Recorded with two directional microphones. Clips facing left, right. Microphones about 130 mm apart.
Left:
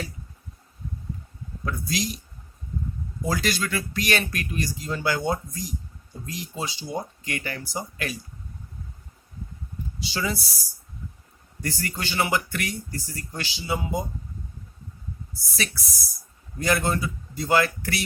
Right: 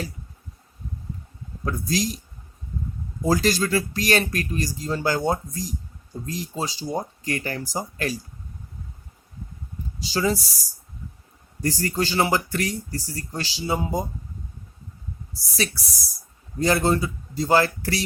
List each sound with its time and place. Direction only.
1.6 s speech: 35° right (ahead or behind)
3.2 s speech: 40° right (ahead or behind)
10.0 s speech: 40° right (ahead or behind)
11.6 s speech: 35° right (ahead or behind)
15.3 s speech: 35° right (ahead or behind)